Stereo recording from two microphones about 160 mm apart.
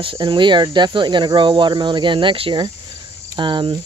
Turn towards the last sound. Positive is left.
turn(degrees=-30)  # may be behind; listen again after turning